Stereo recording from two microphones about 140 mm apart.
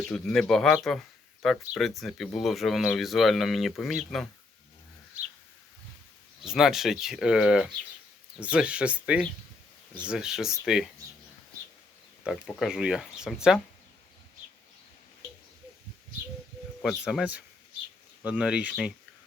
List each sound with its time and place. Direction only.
0.1 s speech: 5° left (ahead or behind)
6.4 s speech: 5° right (ahead or behind)
12.5 s speech: centre (ahead or behind)
16.8 s speech: 5° right (ahead or behind)